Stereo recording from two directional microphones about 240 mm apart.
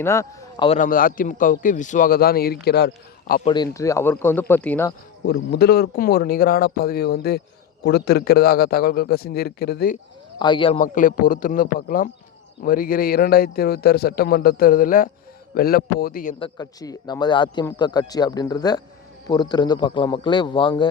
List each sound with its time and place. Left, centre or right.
0.0 s speech: centre
0.8 s a man's voice: left
3.4 s speech: centre
5.2 s a man's voice: left
10.3 s speech: centre
10.8 s a man's voice: left
16.4 s speech: centre